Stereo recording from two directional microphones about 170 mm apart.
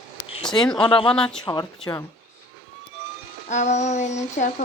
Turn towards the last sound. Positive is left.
turn(degrees=45)  # may be behind; listen again after turning